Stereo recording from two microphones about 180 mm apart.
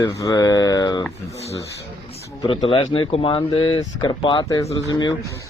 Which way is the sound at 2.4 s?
30° left (ahead or behind).